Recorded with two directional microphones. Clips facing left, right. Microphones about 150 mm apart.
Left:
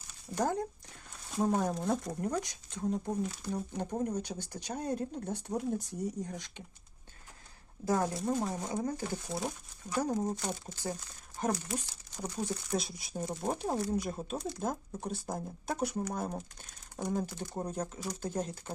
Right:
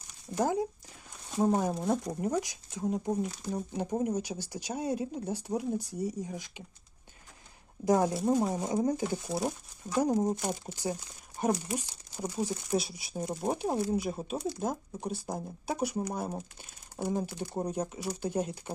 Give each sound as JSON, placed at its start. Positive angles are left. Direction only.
{"t": 0.3, "sound": "speech", "side_deg": -5}
{"t": 7.9, "sound": "speech", "side_deg": -15}
{"t": 9.9, "sound": "speech", "side_deg": -15}
{"t": 13.1, "sound": "speech", "side_deg": -15}